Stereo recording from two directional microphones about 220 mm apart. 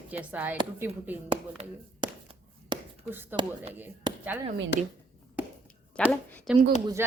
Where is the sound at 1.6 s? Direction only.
25° right (ahead or behind).